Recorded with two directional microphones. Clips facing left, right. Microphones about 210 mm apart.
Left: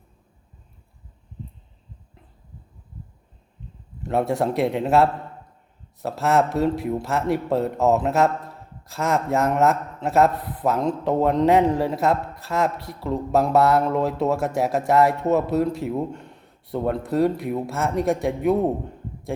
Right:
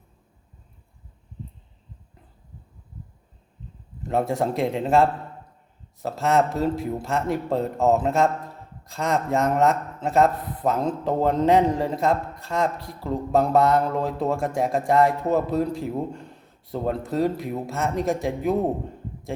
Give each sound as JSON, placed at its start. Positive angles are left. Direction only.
{"t": 4.1, "sound": "a man's voice", "side_deg": 0}